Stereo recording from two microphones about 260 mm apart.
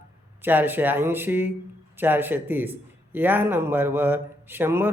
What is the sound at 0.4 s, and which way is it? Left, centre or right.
Speech, centre.